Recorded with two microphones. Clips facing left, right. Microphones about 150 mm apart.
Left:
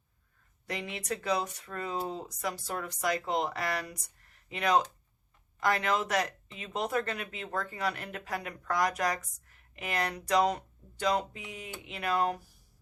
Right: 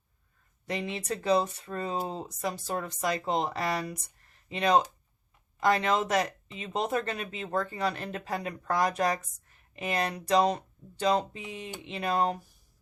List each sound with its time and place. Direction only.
0.6 s speech: 25° right (ahead or behind)